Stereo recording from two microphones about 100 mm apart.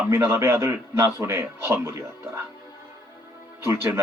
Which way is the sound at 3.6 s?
25° right (ahead or behind).